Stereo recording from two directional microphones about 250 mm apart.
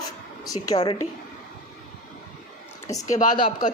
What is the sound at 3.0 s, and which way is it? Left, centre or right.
Speech, left.